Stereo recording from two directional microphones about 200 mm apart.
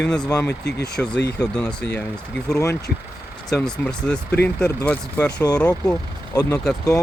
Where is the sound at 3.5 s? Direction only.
5° left (ahead or behind).